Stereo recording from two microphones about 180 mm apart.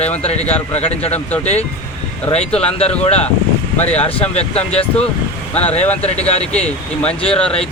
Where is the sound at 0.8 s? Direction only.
35° left (ahead or behind).